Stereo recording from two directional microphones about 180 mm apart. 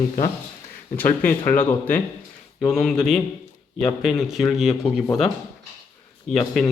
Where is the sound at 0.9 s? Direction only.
10° left (ahead or behind).